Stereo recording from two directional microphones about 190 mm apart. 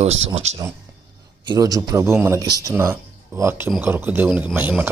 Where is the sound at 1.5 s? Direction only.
20° right (ahead or behind).